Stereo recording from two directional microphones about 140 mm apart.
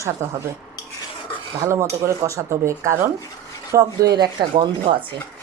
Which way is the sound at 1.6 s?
20° right (ahead or behind).